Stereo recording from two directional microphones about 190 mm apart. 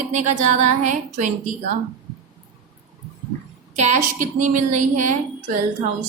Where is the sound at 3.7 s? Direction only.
40° right (ahead or behind).